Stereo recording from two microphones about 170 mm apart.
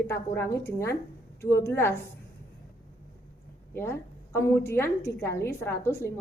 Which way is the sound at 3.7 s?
15° left (ahead or behind).